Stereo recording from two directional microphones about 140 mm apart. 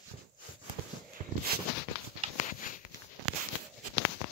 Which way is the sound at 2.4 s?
65° left (ahead or behind).